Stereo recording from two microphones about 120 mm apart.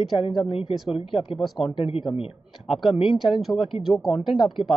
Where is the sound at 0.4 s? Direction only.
50° left (ahead or behind).